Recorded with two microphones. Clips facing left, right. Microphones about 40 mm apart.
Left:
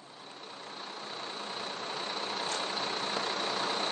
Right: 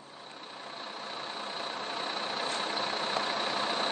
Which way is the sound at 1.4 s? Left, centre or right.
Centre.